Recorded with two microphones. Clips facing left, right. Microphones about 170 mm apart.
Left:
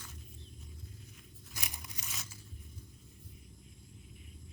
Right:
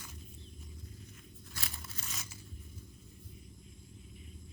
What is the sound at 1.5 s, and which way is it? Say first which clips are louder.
Tearing: even; 15° left (ahead or behind).